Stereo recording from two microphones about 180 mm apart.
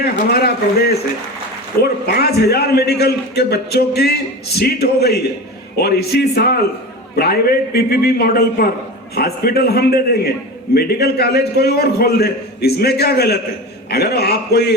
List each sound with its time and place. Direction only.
0.0 s a man's voice: 60° left (ahead or behind)